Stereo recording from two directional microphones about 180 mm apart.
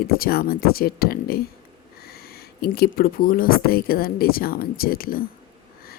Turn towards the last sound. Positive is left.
turn(degrees=55)  # may be behind; listen again after turning